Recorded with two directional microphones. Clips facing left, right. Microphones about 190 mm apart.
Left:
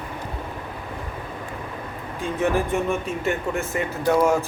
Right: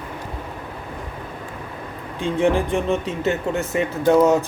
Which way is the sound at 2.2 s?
20° right (ahead or behind).